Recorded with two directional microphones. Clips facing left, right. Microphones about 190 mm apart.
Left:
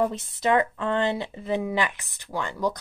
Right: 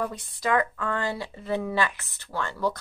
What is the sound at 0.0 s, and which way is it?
Speech, 25° left (ahead or behind).